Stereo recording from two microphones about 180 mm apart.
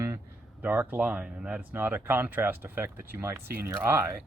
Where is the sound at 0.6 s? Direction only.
10° right (ahead or behind).